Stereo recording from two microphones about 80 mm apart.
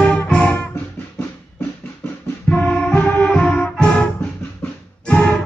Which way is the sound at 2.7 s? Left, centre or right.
Centre.